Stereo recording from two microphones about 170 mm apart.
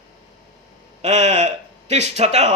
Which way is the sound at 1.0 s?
40° right (ahead or behind).